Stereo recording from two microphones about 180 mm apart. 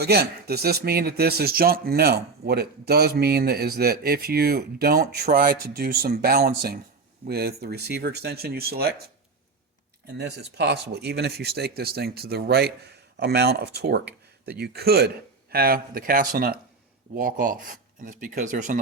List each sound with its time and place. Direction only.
0.0 s speech: 60° right (ahead or behind)
10.2 s speech: 70° right (ahead or behind); by 18.8 s 45° right (ahead or behind)